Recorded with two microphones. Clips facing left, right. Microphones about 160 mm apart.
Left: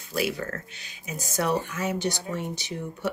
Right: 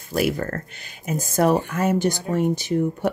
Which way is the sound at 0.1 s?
50° right (ahead or behind).